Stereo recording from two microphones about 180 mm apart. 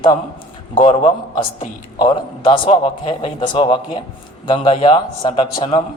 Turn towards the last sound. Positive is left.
turn(degrees=30)  # may be behind; listen again after turning